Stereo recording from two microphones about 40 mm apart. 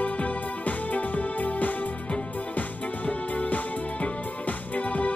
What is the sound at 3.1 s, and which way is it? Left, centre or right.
Music, left.